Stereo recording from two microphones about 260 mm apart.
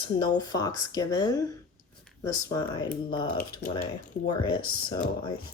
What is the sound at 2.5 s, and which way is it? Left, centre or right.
Speech, centre.